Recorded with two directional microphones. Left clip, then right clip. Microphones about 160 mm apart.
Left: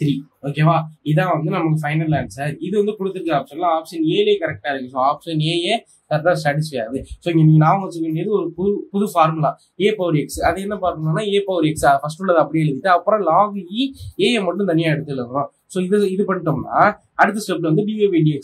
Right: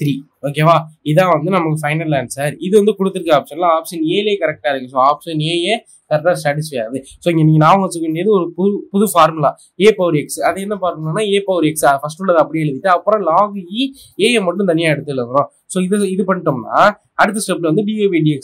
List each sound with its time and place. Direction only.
0.0 s speech: 50° right (ahead or behind); by 7.0 s 25° right (ahead or behind)
7.2 s speech: 40° right (ahead or behind)